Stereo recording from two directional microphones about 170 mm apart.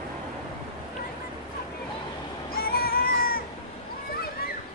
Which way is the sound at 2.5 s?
60° left (ahead or behind).